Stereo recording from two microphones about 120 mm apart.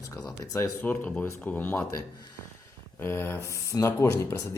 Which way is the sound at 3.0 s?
20° left (ahead or behind).